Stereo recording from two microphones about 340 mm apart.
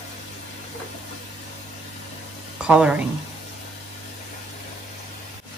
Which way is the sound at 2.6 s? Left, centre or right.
Centre.